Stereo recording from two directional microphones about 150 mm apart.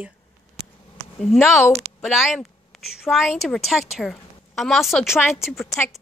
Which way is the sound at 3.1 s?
Centre (ahead or behind).